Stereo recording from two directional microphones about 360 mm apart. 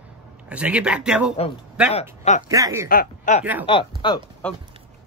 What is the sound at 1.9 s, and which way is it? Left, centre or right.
Speech, centre.